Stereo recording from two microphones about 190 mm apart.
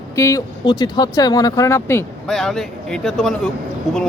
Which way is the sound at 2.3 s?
Centre (ahead or behind).